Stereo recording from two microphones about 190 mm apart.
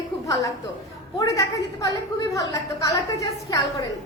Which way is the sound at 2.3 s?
15° left (ahead or behind).